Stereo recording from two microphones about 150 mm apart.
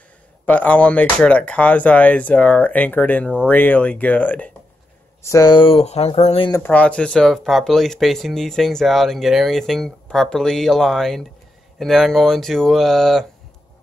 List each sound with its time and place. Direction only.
0.5 s speech: 10° left (ahead or behind)
5.2 s speech: 25° left (ahead or behind); by 6.4 s 45° left (ahead or behind)
6.6 s speech: 10° left (ahead or behind)